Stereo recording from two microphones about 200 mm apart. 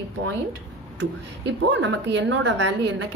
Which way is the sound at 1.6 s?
65° right (ahead or behind).